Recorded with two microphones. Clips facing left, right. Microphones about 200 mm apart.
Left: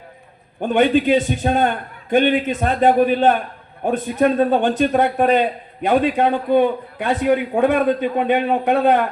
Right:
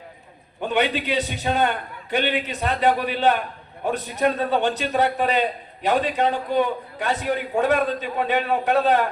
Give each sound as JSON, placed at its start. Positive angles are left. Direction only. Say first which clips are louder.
{"t": 0.6, "sound": "a man's voice", "louder": "left 7 dB", "side_deg": 50}